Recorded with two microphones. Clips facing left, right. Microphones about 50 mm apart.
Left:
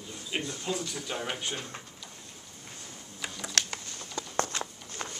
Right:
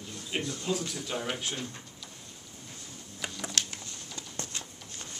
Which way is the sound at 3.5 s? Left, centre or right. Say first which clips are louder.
Left 2 dB; left.